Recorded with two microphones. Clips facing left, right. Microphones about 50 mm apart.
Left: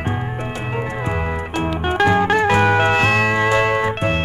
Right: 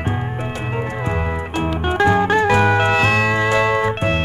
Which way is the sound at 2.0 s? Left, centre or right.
Left.